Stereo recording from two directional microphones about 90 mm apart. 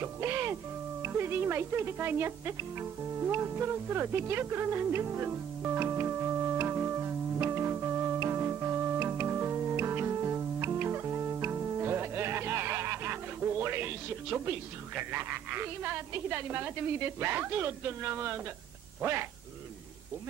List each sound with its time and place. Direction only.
0.0 s speech: 25° right (ahead or behind)
1.0 s music: 25° right (ahead or behind)
15.0 s speech: 25° right (ahead or behind)